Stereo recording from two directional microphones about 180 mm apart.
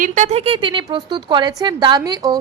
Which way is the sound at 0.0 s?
45° right (ahead or behind).